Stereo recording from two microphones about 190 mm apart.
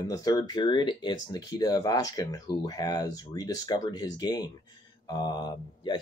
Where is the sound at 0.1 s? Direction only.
20° left (ahead or behind).